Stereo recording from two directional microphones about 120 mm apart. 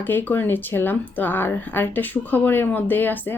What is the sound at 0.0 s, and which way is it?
Speech, 15° left (ahead or behind).